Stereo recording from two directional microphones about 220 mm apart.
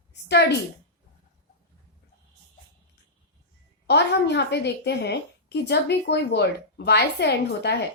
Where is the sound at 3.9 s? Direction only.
50° left (ahead or behind).